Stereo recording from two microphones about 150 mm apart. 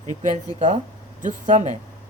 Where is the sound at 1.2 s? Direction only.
55° right (ahead or behind).